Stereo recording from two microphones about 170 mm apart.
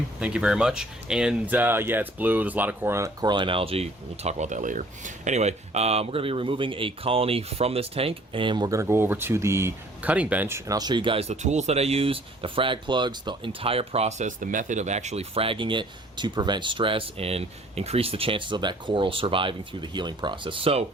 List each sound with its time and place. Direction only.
0.2 s speech: 5° right (ahead or behind); by 20.8 s 35° right (ahead or behind)